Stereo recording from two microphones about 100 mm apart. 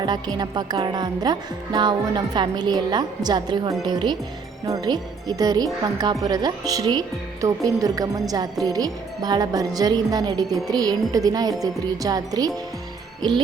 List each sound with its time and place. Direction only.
0.0 s a woman's voice: 45° right (ahead or behind)